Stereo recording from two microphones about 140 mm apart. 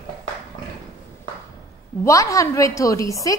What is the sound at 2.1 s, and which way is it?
A woman's voice, 25° left (ahead or behind).